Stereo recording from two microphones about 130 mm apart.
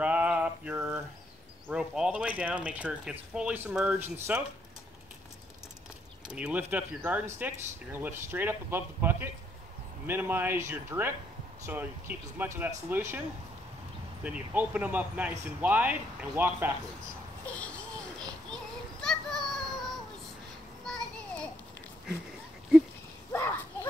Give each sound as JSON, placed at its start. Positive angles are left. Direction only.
{"t": 0.0, "sound": "mantra", "side_deg": -10}
{"t": 1.7, "sound": "speech", "side_deg": -5}
{"t": 6.2, "sound": "speech", "side_deg": -5}
{"t": 14.2, "sound": "speech", "side_deg": -10}
{"t": 17.5, "sound": "children playing", "side_deg": 10}
{"t": 20.8, "sound": "children playing", "side_deg": 5}
{"t": 23.3, "sound": "a sound", "side_deg": 20}